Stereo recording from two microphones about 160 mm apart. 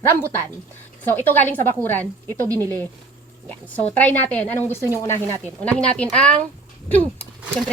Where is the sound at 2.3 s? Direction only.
20° right (ahead or behind).